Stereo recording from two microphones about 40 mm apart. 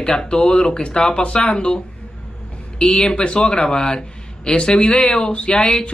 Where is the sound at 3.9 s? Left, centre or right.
Left.